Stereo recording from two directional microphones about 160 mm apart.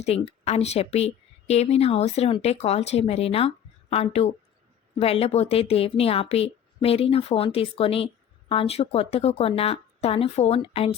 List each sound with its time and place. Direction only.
0.0 s a woman's voice: 40° left (ahead or behind)